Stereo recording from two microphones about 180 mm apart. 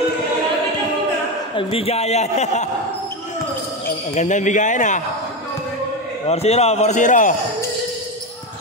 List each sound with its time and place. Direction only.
1.5 s a man's voice: 30° left (ahead or behind)
4.1 s a man's voice: 40° left (ahead or behind)
6.2 s a man's voice: 35° left (ahead or behind)